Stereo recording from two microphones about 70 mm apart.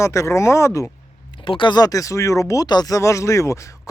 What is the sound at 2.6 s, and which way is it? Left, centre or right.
Speech, left.